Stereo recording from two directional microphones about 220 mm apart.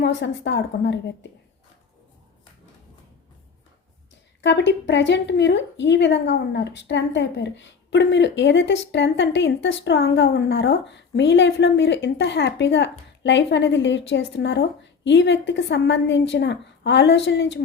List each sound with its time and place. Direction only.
0.0 s a woman's voice: 55° left (ahead or behind)
4.4 s a woman's voice: 55° left (ahead or behind)